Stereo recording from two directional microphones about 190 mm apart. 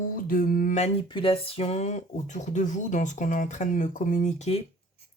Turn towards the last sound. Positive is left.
turn(degrees=40)  # may be behind; listen again after turning